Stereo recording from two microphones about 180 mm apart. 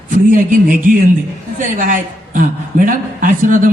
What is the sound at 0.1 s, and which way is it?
A man's voice, 50° right (ahead or behind).